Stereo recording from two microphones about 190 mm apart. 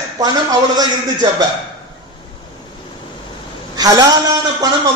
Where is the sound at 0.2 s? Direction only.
20° right (ahead or behind).